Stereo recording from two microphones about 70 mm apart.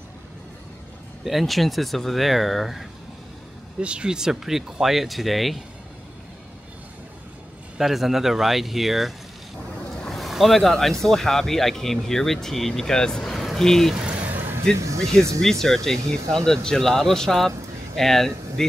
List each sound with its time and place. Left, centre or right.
1.2 s speech: centre
3.8 s speech: centre
7.7 s speech: centre
14.2 s a sound: right
14.8 s speech: right
15.6 s speech: centre